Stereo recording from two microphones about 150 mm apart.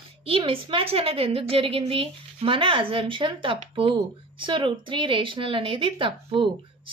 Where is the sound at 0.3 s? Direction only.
35° right (ahead or behind).